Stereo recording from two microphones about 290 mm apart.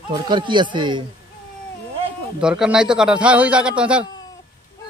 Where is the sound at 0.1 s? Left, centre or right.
Centre.